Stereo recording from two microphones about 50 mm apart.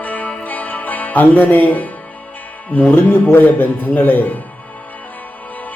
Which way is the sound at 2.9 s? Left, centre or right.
Left.